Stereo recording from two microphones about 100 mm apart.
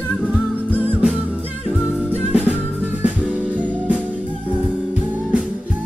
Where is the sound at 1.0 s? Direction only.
10° right (ahead or behind).